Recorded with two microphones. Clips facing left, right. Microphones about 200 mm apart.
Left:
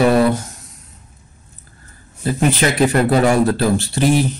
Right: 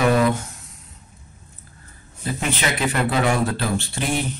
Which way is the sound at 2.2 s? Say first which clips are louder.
Left 8 dB; 40° left (ahead or behind).